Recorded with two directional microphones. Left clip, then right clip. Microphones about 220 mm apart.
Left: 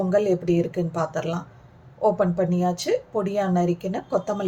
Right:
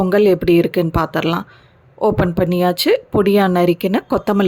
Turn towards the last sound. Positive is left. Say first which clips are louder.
# right 8 dB
turn(degrees=-40)  # may be behind; listen again after turning